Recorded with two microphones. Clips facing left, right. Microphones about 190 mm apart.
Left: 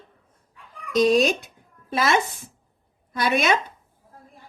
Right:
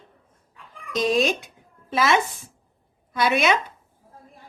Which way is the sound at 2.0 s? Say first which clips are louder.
Right 1 dB; 40° left (ahead or behind).